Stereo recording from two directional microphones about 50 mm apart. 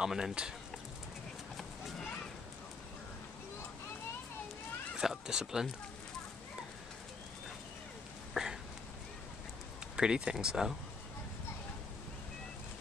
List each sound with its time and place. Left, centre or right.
0.0 s speech: centre
1.6 s clip-clop: centre
4.9 s speech: centre
8.4 s a sound: centre
9.9 s speech: centre